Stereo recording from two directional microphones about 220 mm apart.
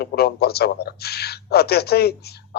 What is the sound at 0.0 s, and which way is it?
A man's voice, 45° left (ahead or behind).